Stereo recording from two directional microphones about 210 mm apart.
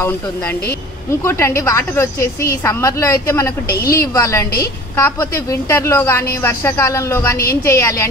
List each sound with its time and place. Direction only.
1.6 s a woman's voice: 10° left (ahead or behind)
3.6 s a woman's voice: 45° left (ahead or behind)
4.1 s a woman's voice: 15° left (ahead or behind)